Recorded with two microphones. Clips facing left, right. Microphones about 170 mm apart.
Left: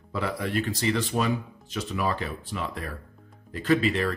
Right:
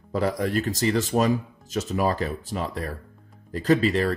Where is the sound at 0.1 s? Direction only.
40° right (ahead or behind).